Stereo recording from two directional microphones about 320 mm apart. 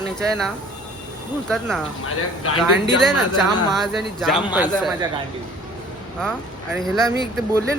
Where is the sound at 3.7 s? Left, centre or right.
Centre.